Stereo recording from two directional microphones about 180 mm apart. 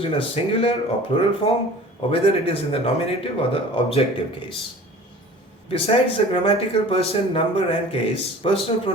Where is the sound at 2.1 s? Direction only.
30° left (ahead or behind).